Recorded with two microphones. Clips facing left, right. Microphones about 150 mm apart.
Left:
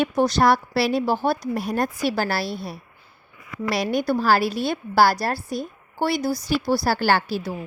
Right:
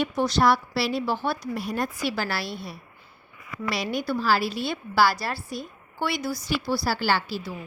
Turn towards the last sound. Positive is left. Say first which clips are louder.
# left 4 dB
turn(degrees=50)  # may be behind; listen again after turning